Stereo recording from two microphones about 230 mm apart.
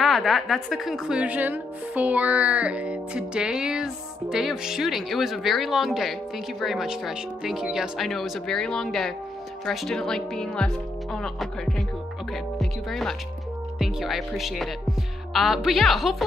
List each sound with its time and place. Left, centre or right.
0.0 s speech: centre
12.5 s music: centre
13.7 s speech: centre